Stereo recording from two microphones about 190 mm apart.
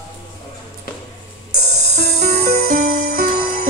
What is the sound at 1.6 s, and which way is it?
Music, 60° right (ahead or behind).